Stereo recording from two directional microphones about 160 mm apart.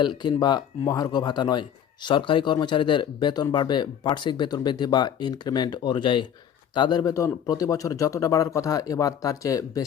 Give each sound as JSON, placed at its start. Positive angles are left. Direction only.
{"t": 0.0, "sound": "speech", "side_deg": 30}